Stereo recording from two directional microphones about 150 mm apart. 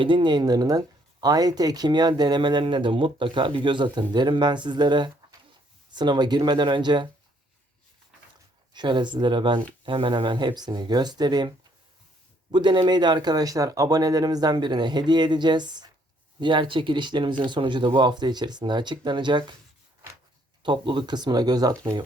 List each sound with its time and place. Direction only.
0.0 s speech: 30° right (ahead or behind)
8.7 s speech: 30° right (ahead or behind)
20.6 s speech: 30° right (ahead or behind)